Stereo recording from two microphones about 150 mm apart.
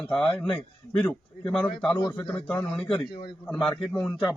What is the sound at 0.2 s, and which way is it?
A man's voice, 5° left (ahead or behind).